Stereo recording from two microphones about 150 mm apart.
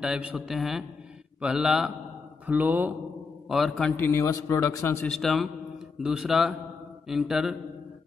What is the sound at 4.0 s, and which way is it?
A man's voice, 20° left (ahead or behind).